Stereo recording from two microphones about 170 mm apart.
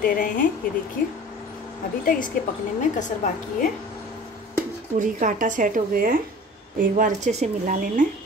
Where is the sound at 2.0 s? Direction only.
55° left (ahead or behind).